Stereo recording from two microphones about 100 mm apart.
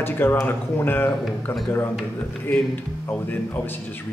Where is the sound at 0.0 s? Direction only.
20° left (ahead or behind).